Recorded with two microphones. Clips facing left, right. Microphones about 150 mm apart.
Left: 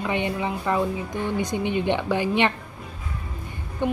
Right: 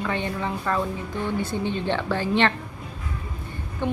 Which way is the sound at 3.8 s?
15° left (ahead or behind).